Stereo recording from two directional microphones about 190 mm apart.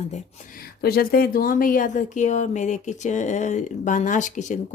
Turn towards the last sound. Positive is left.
turn(degrees=40)  # may be behind; listen again after turning